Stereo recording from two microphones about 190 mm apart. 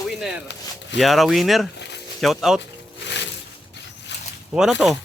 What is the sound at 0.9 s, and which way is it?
Speech, centre (ahead or behind).